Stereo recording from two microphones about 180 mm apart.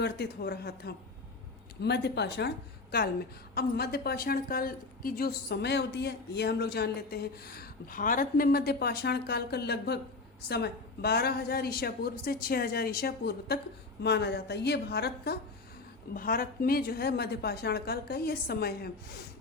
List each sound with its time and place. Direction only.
0.0 s a woman's voice: 65° left (ahead or behind)
3.5 s a woman's voice: 60° left (ahead or behind)